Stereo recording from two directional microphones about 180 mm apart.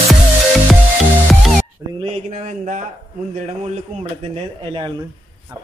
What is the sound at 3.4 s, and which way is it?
Speech, 40° right (ahead or behind).